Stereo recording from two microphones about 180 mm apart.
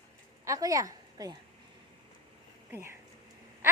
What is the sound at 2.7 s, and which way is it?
Speech, 15° right (ahead or behind).